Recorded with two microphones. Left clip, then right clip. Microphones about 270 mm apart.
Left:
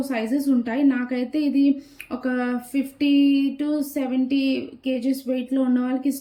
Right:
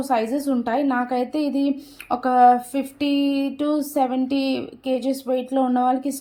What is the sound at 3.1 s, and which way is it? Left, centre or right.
A woman's voice, centre.